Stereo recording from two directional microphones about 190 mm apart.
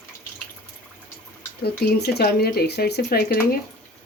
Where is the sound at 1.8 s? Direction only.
60° left (ahead or behind).